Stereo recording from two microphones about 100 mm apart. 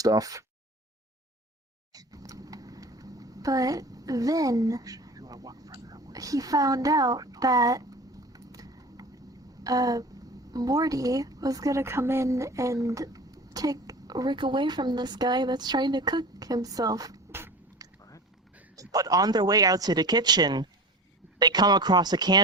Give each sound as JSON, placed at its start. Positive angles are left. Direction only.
{"t": 0.0, "sound": "speech", "side_deg": -35}
{"t": 1.9, "sound": "a sound", "side_deg": -35}
{"t": 9.6, "sound": "a woman's voice", "side_deg": -35}
{"t": 14.3, "sound": "speech", "side_deg": -55}
{"t": 17.8, "sound": "a sound", "side_deg": -40}
{"t": 18.8, "sound": "speech", "side_deg": -35}